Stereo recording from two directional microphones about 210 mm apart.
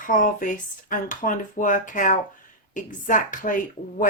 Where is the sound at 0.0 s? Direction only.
40° left (ahead or behind).